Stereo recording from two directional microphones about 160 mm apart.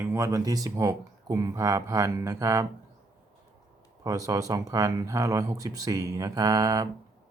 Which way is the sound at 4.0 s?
20° right (ahead or behind).